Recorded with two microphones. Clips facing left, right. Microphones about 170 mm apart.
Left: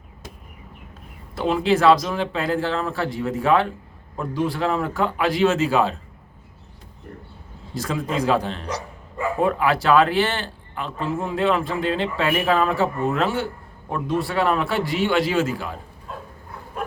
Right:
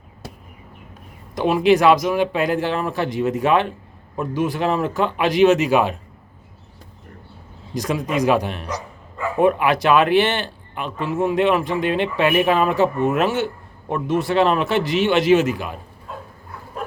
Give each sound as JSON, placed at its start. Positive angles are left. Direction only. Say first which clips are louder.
{"t": 1.4, "sound": "speech", "louder": "right 4 dB", "side_deg": -15}
{"t": 7.7, "sound": "speech", "louder": "right 3 dB", "side_deg": -15}